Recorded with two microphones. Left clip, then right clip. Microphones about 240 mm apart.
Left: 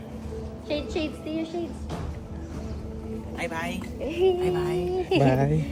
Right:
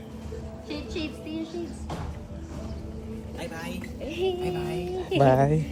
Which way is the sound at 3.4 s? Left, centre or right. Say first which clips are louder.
Left 6 dB; left.